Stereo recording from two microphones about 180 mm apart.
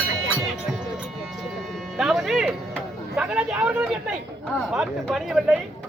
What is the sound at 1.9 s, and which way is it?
Music, centre (ahead or behind).